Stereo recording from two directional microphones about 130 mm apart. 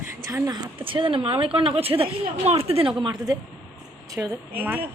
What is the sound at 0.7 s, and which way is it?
A woman's voice, 40° right (ahead or behind).